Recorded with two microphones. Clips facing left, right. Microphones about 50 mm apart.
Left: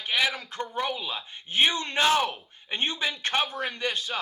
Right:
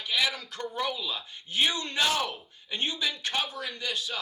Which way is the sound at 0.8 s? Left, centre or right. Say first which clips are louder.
Left 1 dB; left.